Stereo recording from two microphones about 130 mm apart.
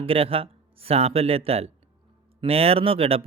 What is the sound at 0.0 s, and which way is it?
Speech, 45° right (ahead or behind).